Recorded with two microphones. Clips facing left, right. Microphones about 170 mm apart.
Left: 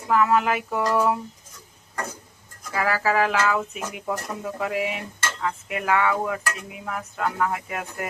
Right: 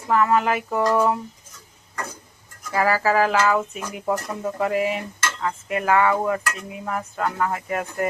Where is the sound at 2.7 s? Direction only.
35° right (ahead or behind).